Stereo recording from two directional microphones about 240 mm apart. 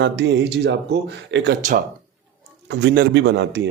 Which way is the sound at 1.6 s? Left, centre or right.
Right.